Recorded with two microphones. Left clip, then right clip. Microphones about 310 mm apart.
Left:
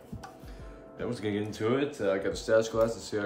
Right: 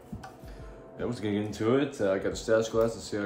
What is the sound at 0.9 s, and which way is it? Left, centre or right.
Speech, centre.